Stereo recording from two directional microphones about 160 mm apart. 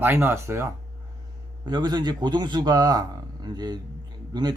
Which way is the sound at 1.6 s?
25° right (ahead or behind).